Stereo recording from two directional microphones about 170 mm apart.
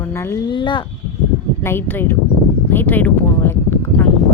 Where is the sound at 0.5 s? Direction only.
30° left (ahead or behind).